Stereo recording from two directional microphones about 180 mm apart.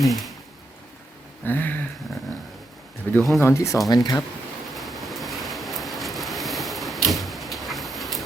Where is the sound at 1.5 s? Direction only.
10° left (ahead or behind).